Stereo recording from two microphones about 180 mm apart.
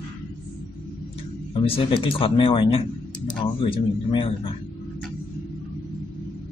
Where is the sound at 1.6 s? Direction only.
30° left (ahead or behind).